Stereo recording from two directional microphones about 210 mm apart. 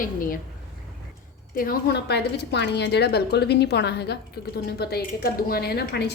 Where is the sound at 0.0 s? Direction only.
40° left (ahead or behind).